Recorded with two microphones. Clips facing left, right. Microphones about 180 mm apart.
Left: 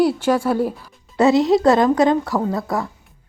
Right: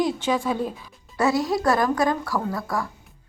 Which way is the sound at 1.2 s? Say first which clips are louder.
Left 8 dB; 25° left (ahead or behind).